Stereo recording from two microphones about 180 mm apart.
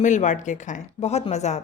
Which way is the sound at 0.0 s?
45° left (ahead or behind).